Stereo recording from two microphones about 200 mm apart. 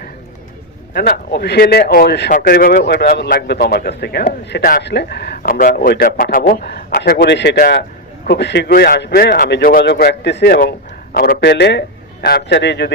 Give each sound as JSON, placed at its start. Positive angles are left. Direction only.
{"t": 0.9, "sound": "a man's voice", "side_deg": 55}